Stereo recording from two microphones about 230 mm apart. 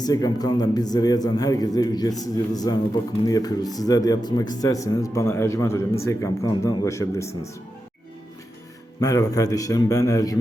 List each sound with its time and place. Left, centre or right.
0.0 s a man's voice: centre
9.0 s a man's voice: centre